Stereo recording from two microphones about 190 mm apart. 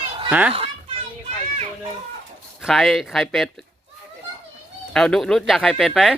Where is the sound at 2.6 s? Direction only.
Centre (ahead or behind).